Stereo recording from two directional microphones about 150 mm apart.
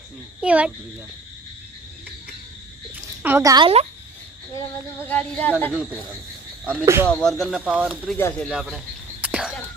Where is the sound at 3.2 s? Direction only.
15° right (ahead or behind).